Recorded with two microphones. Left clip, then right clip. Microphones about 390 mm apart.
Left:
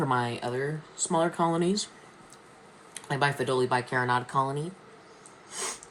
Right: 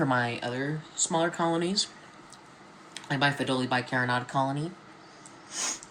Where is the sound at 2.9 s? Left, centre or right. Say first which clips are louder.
Even; centre.